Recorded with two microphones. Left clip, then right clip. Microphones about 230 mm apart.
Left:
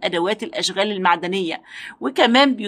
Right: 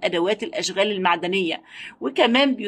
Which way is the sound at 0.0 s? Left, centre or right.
Centre.